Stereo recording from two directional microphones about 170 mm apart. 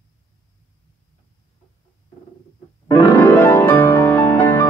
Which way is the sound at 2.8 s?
20° left (ahead or behind).